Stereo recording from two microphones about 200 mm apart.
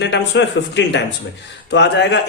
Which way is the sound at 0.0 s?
60° left (ahead or behind).